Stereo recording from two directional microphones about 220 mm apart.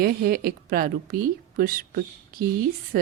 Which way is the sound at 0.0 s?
45° right (ahead or behind).